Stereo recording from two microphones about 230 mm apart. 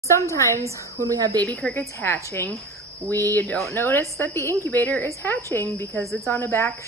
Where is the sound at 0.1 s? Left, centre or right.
Centre.